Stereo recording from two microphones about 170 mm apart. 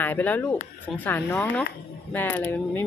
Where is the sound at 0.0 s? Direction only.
10° left (ahead or behind).